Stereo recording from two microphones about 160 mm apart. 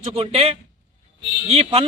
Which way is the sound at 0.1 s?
40° right (ahead or behind).